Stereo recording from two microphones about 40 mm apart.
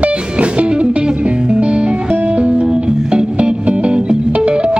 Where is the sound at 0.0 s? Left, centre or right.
Right.